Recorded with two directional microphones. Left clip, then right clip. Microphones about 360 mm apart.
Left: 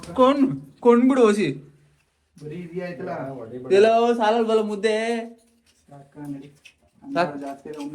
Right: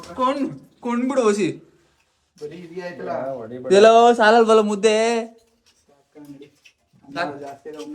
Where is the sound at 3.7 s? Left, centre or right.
Centre.